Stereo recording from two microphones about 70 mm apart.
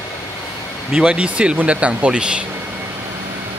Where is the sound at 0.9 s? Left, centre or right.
Centre.